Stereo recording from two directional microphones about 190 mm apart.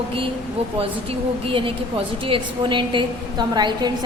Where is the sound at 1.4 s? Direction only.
25° right (ahead or behind).